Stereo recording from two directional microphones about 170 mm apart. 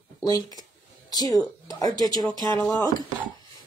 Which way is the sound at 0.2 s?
20° left (ahead or behind).